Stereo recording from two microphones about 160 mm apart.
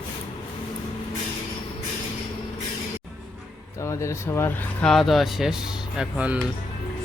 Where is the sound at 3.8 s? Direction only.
20° left (ahead or behind).